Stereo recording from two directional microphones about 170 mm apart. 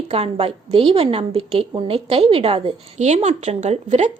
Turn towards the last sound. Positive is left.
turn(degrees=-40)  # may be behind; listen again after turning